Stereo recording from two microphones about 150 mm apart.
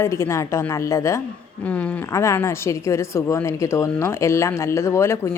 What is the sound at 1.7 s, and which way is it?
Speech, 10° left (ahead or behind).